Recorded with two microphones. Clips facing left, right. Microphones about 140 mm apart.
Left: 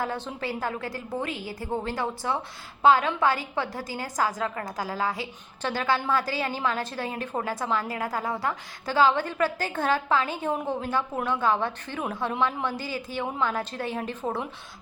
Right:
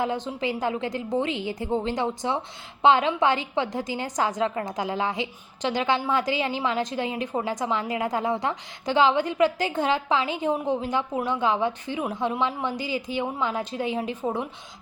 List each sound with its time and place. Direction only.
0.0 s a woman's voice: 15° right (ahead or behind)